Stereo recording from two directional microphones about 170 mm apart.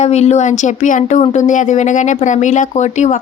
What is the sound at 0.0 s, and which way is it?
Speech, 40° left (ahead or behind).